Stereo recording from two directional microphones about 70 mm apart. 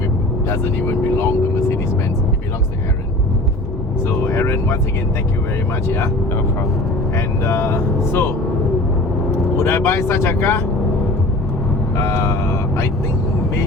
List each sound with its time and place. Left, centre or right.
0.4 s speech: left
4.0 s speech: left
5.9 s speech: left
9.6 s speech: left
11.9 s speech: left